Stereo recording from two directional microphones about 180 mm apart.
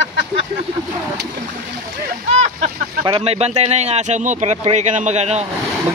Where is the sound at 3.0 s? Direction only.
30° right (ahead or behind).